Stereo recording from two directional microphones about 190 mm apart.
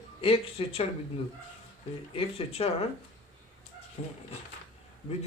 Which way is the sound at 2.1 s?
30° left (ahead or behind).